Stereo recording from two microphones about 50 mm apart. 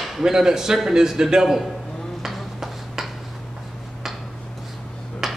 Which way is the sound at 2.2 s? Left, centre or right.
Centre.